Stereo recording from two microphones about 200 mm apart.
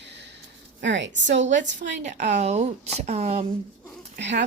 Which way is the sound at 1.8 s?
40° right (ahead or behind).